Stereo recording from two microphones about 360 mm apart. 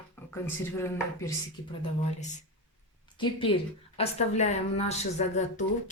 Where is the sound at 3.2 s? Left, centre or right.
Centre.